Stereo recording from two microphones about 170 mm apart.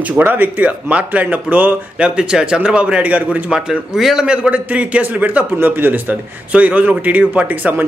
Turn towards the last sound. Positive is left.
turn(degrees=-10)  # may be behind; listen again after turning